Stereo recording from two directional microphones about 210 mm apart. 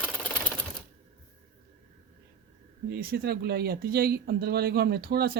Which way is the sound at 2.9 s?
45° right (ahead or behind).